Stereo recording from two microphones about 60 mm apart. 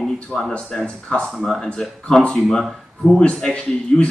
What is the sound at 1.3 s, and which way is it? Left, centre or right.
Speech, centre.